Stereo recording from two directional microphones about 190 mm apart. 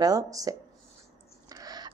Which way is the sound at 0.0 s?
20° right (ahead or behind).